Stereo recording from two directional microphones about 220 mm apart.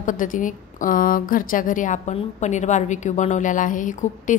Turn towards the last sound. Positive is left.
turn(degrees=35)  # may be behind; listen again after turning